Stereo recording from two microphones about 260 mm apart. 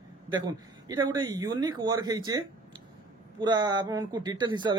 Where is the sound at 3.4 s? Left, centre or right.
Centre.